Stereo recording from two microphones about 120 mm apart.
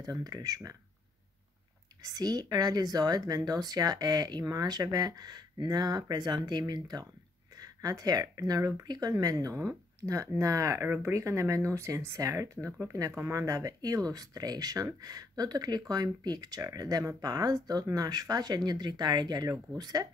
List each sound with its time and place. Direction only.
0.0 s speech: 30° right (ahead or behind)
2.0 s speech: 30° right (ahead or behind)